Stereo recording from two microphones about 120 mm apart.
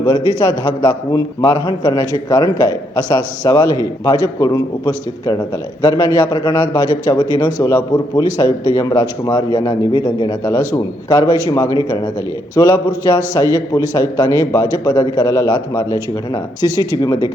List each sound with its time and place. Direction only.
0.1 s a man's voice: 35° left (ahead or behind)